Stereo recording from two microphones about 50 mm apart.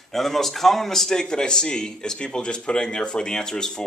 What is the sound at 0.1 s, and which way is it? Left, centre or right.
Speech, centre.